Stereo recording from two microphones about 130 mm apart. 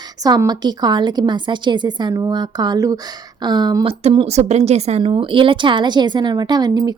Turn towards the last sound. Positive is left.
turn(degrees=-30)  # may be behind; listen again after turning